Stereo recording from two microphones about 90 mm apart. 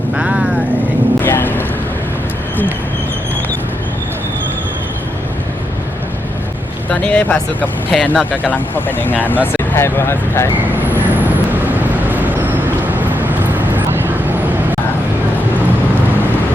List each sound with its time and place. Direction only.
0.2 s vehicle: 15° right (ahead or behind)
1.2 s vehicle: 20° left (ahead or behind)
6.9 s speech: 15° left (ahead or behind); by 10.5 s 30° left (ahead or behind)
10.8 s vehicle: 20° right (ahead or behind)